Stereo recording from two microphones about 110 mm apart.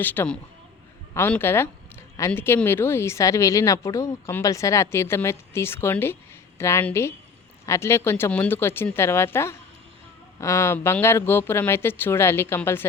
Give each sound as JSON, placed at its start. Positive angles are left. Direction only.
{"t": 0.0, "sound": "speech", "side_deg": 15}
{"t": 1.4, "sound": "speech", "side_deg": 20}